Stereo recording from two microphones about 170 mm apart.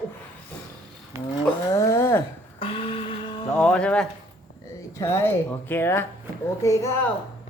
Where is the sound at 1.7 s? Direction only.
20° left (ahead or behind).